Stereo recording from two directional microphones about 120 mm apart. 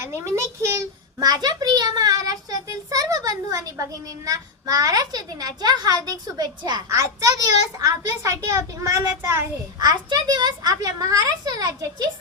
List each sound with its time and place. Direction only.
0.0 s a child's voice: 20° right (ahead or behind)
9.8 s a child's voice: 35° right (ahead or behind)